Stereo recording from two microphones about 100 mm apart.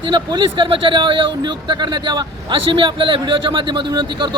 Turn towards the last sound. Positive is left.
turn(degrees=-50)  # may be behind; listen again after turning